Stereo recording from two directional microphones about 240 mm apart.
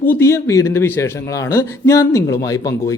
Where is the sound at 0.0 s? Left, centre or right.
Centre.